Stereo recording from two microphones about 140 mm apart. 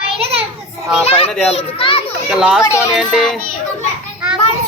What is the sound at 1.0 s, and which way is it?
Speech, 45° left (ahead or behind).